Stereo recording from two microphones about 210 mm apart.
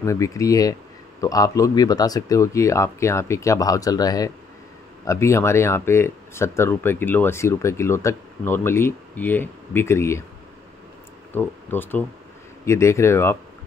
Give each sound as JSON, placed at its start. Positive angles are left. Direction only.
{"t": 0.0, "sound": "speech", "side_deg": 15}
{"t": 11.3, "sound": "speech", "side_deg": 10}